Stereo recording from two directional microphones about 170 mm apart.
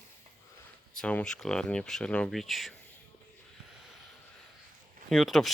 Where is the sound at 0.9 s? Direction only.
5° left (ahead or behind).